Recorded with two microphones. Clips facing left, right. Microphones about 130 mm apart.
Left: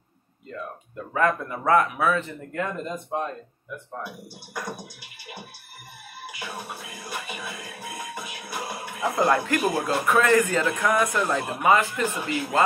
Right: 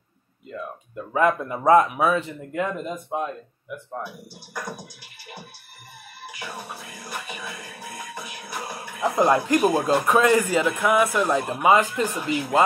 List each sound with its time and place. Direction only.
0.5 s a man's voice: 15° right (ahead or behind)
6.4 s music: 5° left (ahead or behind)
9.1 s a man's voice: 20° right (ahead or behind)